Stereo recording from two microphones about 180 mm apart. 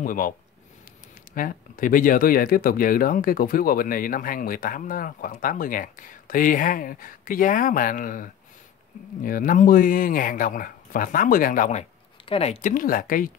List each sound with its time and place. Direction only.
0.0 s speech: 50° left (ahead or behind)
1.3 s speech: 50° left (ahead or behind)
12.3 s speech: 35° left (ahead or behind)